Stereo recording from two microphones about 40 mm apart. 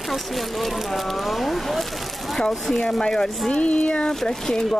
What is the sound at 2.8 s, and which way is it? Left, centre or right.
Speech, centre.